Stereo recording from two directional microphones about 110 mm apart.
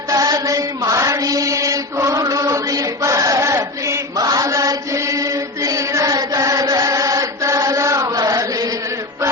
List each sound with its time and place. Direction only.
0.1 s chant: 35° right (ahead or behind)